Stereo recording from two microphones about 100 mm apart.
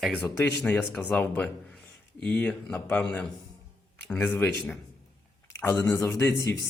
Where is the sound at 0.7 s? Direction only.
10° left (ahead or behind).